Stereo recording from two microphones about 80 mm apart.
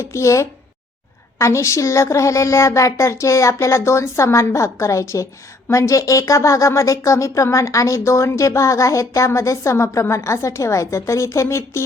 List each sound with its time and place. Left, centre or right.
0.0 s speech: left